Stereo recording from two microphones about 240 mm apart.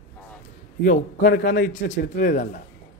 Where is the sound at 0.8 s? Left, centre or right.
Left.